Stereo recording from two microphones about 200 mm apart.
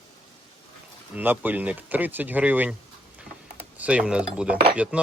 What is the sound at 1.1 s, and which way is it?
Speech, 10° right (ahead or behind).